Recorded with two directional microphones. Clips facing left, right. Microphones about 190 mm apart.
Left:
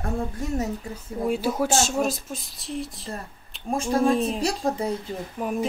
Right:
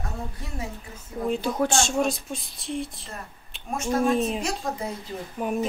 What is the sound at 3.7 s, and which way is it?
Speech, 30° left (ahead or behind).